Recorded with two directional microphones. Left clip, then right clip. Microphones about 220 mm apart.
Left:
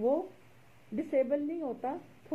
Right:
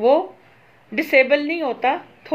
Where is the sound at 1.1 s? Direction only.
15° right (ahead or behind).